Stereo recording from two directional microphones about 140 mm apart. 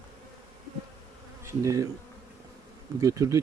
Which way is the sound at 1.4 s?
25° right (ahead or behind).